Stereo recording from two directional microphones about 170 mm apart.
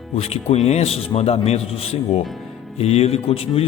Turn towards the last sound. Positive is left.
turn(degrees=35)  # may be behind; listen again after turning